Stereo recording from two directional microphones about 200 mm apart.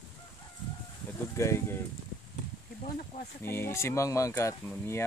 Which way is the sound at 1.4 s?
15° left (ahead or behind).